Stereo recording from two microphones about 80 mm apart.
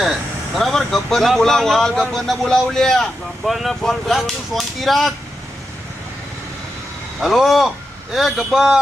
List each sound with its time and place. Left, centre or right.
0.5 s speech: centre
7.2 s speech: centre